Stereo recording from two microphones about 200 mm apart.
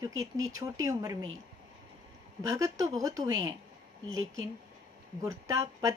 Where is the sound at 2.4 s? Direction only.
15° right (ahead or behind).